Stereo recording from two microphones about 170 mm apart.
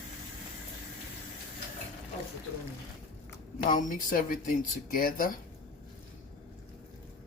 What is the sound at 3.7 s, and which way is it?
Speech, 50° left (ahead or behind).